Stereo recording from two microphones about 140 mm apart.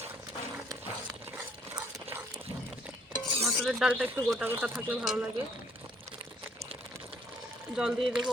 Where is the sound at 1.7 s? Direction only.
15° right (ahead or behind).